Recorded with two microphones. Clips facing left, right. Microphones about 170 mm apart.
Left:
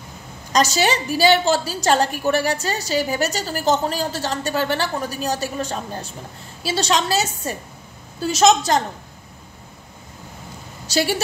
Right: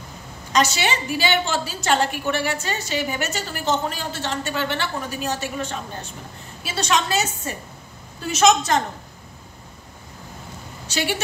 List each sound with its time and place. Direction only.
0.5 s a woman's voice: 40° left (ahead or behind)
10.9 s speech: 40° left (ahead or behind)